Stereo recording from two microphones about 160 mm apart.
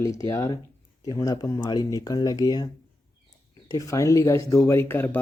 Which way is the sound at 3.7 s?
20° left (ahead or behind).